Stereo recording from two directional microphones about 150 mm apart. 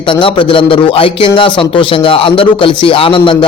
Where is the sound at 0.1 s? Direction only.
35° left (ahead or behind).